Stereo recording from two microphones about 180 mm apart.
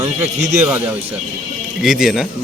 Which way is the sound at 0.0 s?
40° right (ahead or behind).